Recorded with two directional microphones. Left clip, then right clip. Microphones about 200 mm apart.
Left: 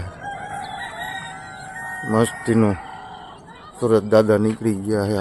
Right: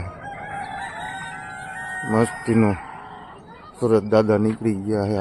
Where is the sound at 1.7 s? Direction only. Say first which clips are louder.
Left 1 dB; centre (ahead or behind).